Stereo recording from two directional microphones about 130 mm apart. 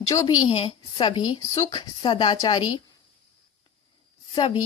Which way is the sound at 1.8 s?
40° left (ahead or behind).